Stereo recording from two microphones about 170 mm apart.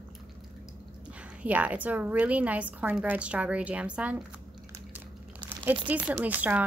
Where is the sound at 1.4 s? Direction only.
10° right (ahead or behind).